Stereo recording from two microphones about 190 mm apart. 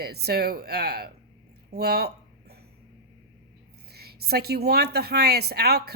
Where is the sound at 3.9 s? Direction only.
55° right (ahead or behind).